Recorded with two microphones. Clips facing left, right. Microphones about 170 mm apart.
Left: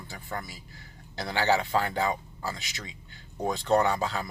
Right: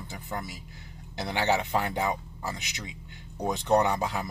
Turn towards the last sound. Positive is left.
turn(degrees=-20)  # may be behind; listen again after turning